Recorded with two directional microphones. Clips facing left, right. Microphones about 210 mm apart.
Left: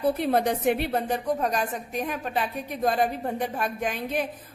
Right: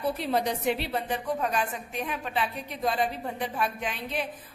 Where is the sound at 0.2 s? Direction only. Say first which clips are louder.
Left 4 dB; 50° left (ahead or behind).